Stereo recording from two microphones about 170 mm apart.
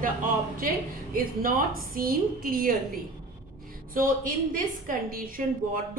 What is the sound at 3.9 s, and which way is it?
A woman's voice, 55° right (ahead or behind).